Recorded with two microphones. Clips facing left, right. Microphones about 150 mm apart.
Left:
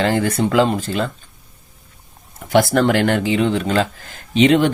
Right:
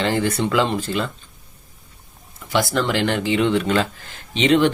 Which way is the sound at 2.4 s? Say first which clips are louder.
Left 6 dB; 55° left (ahead or behind).